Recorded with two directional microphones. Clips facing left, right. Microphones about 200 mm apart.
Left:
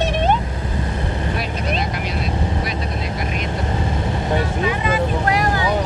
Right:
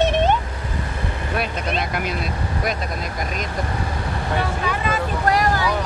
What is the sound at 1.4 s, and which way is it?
A man's voice, 55° right (ahead or behind).